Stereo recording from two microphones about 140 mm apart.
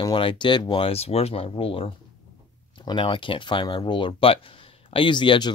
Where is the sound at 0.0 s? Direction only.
35° left (ahead or behind).